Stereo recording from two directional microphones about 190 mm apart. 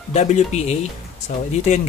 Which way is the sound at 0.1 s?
35° left (ahead or behind).